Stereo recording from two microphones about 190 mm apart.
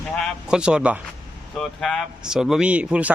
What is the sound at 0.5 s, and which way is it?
Speech, 5° right (ahead or behind).